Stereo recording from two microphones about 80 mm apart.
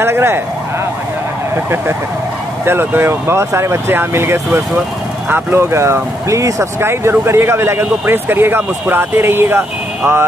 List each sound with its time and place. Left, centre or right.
0.0 s speech: right
2.6 s speech: right